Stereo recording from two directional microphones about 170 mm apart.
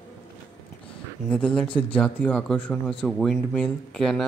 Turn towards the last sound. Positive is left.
turn(degrees=0)  # may be behind; listen again after turning